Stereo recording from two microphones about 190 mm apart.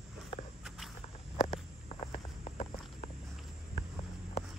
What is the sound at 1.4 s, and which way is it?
Walk, 30° left (ahead or behind).